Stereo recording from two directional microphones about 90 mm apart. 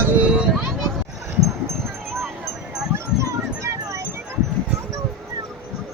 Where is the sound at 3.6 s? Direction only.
35° right (ahead or behind).